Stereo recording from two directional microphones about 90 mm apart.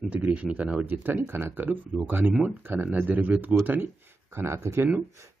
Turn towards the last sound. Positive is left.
turn(degrees=-30)  # may be behind; listen again after turning